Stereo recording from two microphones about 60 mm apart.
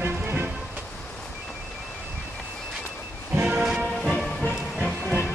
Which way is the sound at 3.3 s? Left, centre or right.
Right.